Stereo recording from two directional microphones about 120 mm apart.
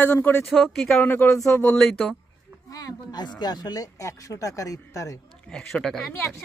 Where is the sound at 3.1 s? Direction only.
35° left (ahead or behind).